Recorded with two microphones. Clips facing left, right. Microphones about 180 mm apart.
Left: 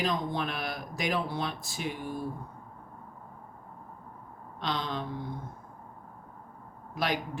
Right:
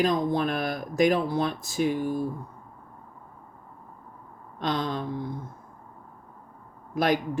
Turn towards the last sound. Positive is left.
turn(degrees=-45)  # may be behind; listen again after turning